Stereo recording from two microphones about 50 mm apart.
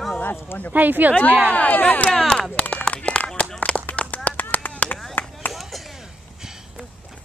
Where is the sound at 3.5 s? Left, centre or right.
Left.